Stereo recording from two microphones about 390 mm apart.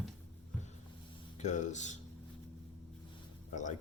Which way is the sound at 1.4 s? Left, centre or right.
Centre.